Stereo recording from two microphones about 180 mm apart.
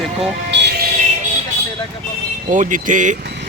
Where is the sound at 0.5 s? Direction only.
65° right (ahead or behind).